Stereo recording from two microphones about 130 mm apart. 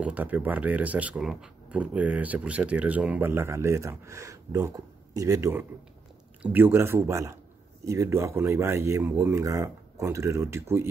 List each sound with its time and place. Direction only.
0.0 s speech: 10° right (ahead or behind)